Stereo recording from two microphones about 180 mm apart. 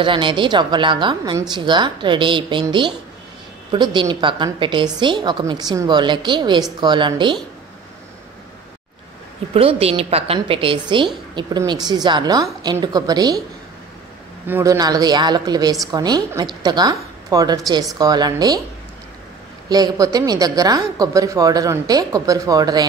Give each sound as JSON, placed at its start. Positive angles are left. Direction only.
{"t": 0.0, "sound": "speech", "side_deg": -25}
{"t": 9.5, "sound": "a woman's voice", "side_deg": -30}
{"t": 14.5, "sound": "speech", "side_deg": -20}
{"t": 19.7, "sound": "speech", "side_deg": -20}